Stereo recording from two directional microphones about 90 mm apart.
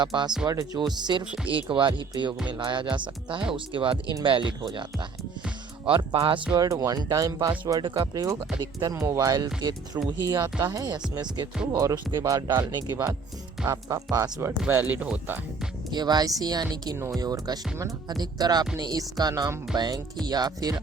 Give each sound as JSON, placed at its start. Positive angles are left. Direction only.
{"t": 0.0, "sound": "speech", "side_deg": -60}
{"t": 0.4, "sound": "speech", "side_deg": -45}
{"t": 1.5, "sound": "speech", "side_deg": -70}
{"t": 3.5, "sound": "speech", "side_deg": -80}
{"t": 4.6, "sound": "speech", "side_deg": -60}
{"t": 6.6, "sound": "speech", "side_deg": -40}
{"t": 7.8, "sound": "speech", "side_deg": -55}
{"t": 11.7, "sound": "speech", "side_deg": -40}
{"t": 14.7, "sound": "speech", "side_deg": -25}
{"t": 15.9, "sound": "speech", "side_deg": -50}